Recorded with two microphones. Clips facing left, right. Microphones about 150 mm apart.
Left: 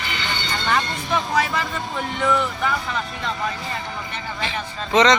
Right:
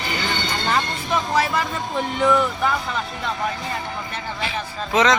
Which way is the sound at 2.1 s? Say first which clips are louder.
Right 3 dB; 5° right (ahead or behind).